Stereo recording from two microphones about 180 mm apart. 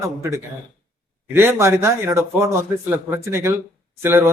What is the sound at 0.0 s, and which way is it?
Speech, 15° right (ahead or behind).